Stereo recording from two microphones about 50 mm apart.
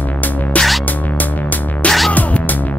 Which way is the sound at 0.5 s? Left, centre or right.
Left.